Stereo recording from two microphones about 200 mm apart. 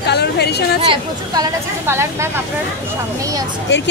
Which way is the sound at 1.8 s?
15° right (ahead or behind).